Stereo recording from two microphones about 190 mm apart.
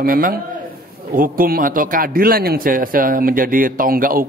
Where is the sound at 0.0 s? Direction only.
50° right (ahead or behind).